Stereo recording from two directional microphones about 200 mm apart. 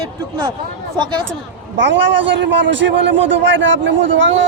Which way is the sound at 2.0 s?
65° right (ahead or behind).